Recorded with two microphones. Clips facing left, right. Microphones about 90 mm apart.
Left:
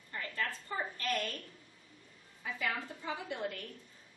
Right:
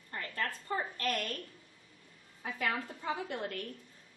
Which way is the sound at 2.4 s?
50° right (ahead or behind).